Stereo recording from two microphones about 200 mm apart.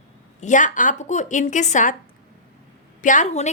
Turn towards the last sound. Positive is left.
turn(degrees=35)  # may be behind; listen again after turning